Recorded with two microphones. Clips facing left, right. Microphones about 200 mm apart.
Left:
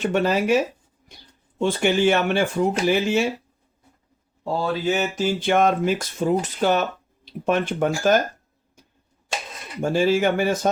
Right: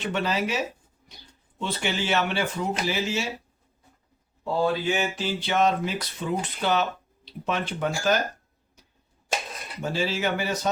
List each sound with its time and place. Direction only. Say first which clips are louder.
0.0 s speech: left 6 dB; 45° left (ahead or behind)
4.6 s speech: left 2 dB; 40° left (ahead or behind)
9.8 s speech: left 8 dB; 50° left (ahead or behind)